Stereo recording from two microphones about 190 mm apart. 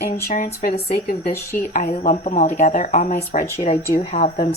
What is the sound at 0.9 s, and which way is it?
Speech, 50° left (ahead or behind).